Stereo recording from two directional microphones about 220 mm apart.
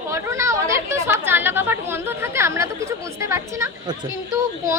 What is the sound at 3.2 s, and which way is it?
Speech, 15° right (ahead or behind).